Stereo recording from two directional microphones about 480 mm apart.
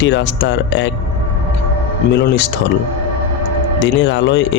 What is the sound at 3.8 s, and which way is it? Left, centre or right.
Speech, left.